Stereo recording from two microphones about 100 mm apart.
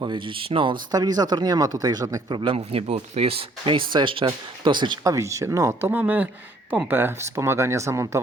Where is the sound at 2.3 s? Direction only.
70° right (ahead or behind); by 5.0 s 50° right (ahead or behind).